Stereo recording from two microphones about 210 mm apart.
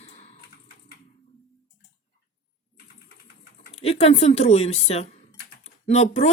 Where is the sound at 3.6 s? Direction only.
30° left (ahead or behind).